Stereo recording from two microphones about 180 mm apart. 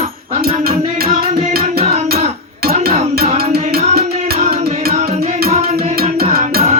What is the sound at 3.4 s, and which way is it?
Music, 60° right (ahead or behind).